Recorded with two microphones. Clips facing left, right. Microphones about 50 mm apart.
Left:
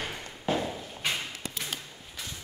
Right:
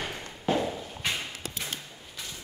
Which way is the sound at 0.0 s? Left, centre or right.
Centre.